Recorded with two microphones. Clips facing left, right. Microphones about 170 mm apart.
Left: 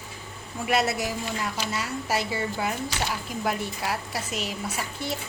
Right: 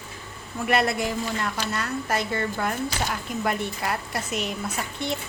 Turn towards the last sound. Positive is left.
turn(degrees=5)  # may be behind; listen again after turning